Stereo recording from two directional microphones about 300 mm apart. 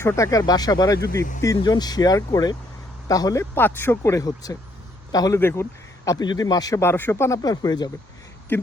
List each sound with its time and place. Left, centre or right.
0.0 s speech: centre